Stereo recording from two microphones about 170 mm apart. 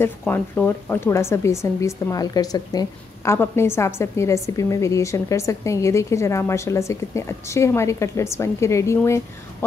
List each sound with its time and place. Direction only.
0.0 s a woman's voice: 10° left (ahead or behind)